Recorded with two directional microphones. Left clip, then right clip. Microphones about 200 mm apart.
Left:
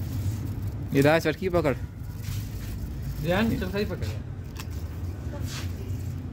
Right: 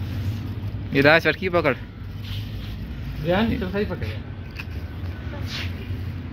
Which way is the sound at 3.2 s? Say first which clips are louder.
Right 4 dB; 40° right (ahead or behind).